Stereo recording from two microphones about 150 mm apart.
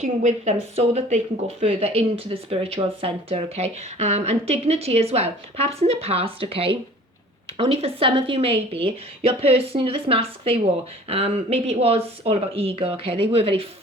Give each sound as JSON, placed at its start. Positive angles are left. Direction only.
{"t": 0.0, "sound": "speech", "side_deg": -50}